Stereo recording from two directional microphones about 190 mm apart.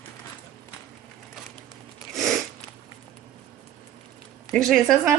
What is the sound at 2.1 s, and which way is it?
Sniff, centre (ahead or behind).